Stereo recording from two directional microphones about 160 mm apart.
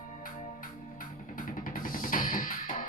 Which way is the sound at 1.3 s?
60° left (ahead or behind).